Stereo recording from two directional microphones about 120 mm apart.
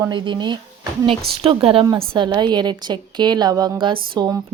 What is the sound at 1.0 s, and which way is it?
Speech, 50° right (ahead or behind).